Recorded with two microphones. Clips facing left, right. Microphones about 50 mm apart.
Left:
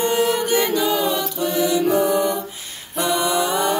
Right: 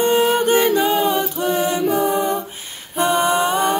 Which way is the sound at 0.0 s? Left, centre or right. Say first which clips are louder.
Right 3 dB; right.